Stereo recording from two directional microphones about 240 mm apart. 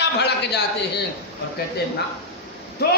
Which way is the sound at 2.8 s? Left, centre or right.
Left.